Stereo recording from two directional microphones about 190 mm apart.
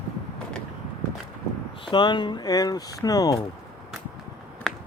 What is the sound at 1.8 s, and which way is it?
Speech, 25° left (ahead or behind).